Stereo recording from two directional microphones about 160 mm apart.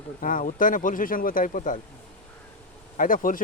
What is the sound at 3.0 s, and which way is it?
Speech, 60° left (ahead or behind).